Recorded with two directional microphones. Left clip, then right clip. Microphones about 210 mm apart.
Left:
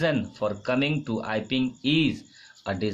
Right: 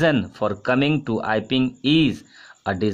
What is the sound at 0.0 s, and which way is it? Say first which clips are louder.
Speech: right 6 dB; 40° right (ahead or behind).